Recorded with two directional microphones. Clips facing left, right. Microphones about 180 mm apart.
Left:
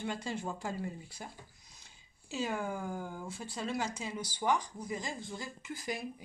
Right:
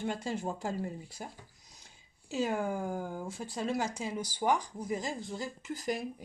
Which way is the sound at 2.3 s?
45° right (ahead or behind).